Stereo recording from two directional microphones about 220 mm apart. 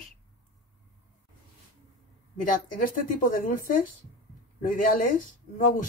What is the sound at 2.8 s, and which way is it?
Speech, 40° left (ahead or behind).